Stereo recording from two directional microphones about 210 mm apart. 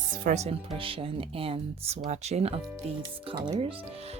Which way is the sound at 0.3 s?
30° right (ahead or behind).